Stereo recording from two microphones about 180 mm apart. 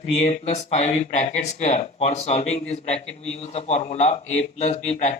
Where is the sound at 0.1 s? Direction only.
40° left (ahead or behind).